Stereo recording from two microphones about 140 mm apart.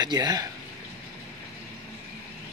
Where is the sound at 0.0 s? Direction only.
30° right (ahead or behind).